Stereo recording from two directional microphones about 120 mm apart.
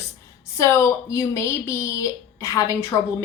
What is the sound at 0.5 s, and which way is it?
A woman's voice, 25° left (ahead or behind).